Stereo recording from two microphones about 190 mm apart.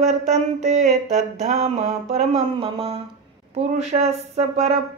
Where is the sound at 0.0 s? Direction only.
35° right (ahead or behind).